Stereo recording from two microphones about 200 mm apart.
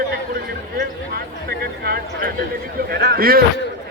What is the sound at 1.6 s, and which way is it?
Speech, 50° right (ahead or behind).